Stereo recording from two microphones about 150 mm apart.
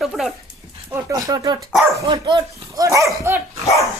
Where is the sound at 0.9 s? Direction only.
25° right (ahead or behind).